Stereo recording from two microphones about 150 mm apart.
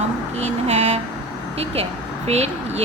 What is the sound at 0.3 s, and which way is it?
Vehicle, 45° right (ahead or behind).